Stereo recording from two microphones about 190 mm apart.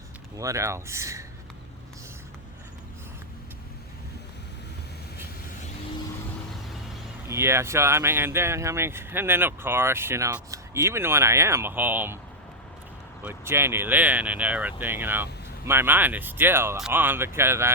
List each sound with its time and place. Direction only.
0.3 s speech: 15° right (ahead or behind)
7.3 s speech: 15° right (ahead or behind)
13.2 s speech: 10° right (ahead or behind)